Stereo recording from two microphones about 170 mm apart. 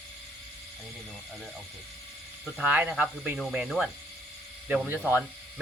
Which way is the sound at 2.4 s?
5° right (ahead or behind).